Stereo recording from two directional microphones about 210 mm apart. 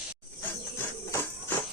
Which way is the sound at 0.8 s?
10° left (ahead or behind).